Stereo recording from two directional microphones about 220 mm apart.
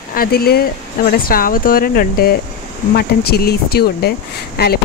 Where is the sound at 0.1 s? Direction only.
45° left (ahead or behind).